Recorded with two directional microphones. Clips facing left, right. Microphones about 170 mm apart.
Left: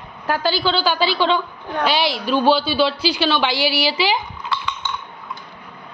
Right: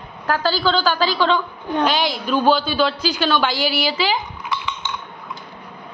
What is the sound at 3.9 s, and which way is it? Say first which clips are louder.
Speech: left 1 dB; 10° left (ahead or behind).